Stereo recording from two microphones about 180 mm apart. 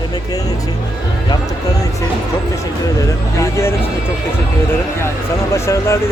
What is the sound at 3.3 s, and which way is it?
Speech, 15° left (ahead or behind).